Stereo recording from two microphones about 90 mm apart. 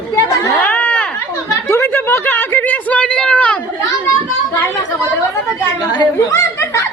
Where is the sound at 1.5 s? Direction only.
30° left (ahead or behind); by 3.6 s 15° left (ahead or behind).